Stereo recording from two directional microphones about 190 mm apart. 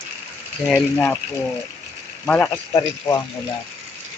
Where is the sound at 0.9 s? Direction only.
10° left (ahead or behind).